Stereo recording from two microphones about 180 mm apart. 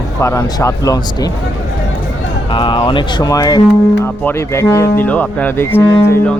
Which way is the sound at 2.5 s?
25° left (ahead or behind).